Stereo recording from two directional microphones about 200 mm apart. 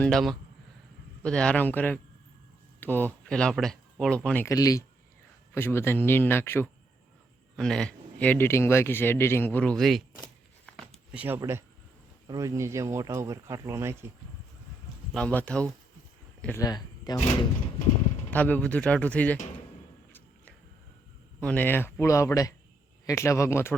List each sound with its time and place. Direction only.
0.0 s speech: centre (ahead or behind)
4.4 s speech: 15° left (ahead or behind); by 10.0 s centre (ahead or behind)
11.1 s speech: 10° right (ahead or behind)
15.1 s speech: 5° left (ahead or behind)
18.3 s speech: 10° left (ahead or behind)
21.4 s speech: 10° left (ahead or behind)